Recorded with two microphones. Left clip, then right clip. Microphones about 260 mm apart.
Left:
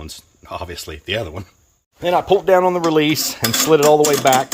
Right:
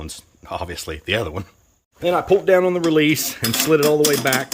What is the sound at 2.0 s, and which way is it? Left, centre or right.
Cutlery, centre.